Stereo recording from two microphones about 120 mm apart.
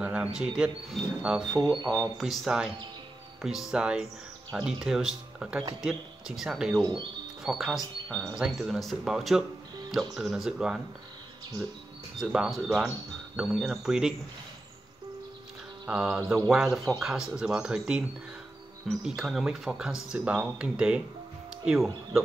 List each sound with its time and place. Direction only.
0.0 s speech: 10° right (ahead or behind)
1.6 s speech: 40° right (ahead or behind)
1.9 s speech: centre (ahead or behind)
6.8 s speech: 45° right (ahead or behind)
7.4 s speech: 5° right (ahead or behind)
12.2 s speech: 5° right (ahead or behind)
15.9 s speech: 10° right (ahead or behind)